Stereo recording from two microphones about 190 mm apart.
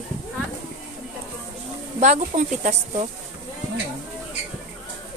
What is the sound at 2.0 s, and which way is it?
Speech, 40° right (ahead or behind).